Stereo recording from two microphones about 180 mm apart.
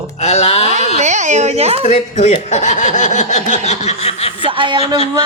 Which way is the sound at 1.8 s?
40° left (ahead or behind).